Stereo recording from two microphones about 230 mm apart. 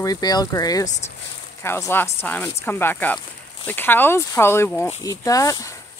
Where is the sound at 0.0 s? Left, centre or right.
Centre.